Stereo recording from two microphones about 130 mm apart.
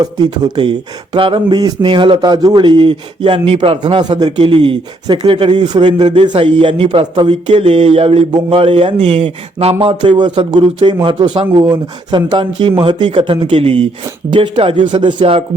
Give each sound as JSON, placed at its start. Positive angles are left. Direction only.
{"t": 0.0, "sound": "speech", "side_deg": -30}
{"t": 9.0, "sound": "speech", "side_deg": -55}